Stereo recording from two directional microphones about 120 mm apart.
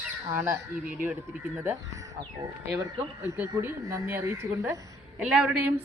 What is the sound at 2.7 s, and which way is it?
Speech, 20° right (ahead or behind).